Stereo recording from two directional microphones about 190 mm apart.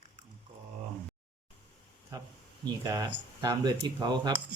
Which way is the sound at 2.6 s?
20° right (ahead or behind).